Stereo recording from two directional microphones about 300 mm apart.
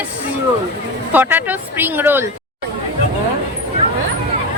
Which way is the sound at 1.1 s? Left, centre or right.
Centre.